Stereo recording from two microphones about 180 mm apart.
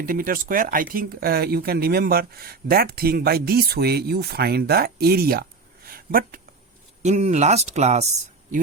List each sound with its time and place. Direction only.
0.0 s speech: 55° right (ahead or behind)
7.0 s speech: 40° right (ahead or behind)